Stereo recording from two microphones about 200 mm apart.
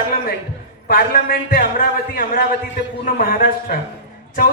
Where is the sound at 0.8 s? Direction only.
50° left (ahead or behind).